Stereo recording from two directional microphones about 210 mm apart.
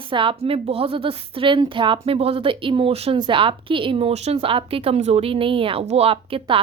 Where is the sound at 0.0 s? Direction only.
25° right (ahead or behind).